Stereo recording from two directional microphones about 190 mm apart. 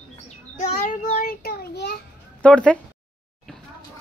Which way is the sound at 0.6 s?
40° left (ahead or behind).